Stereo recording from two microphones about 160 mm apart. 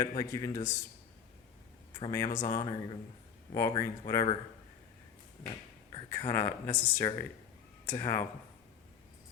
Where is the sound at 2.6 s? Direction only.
30° left (ahead or behind).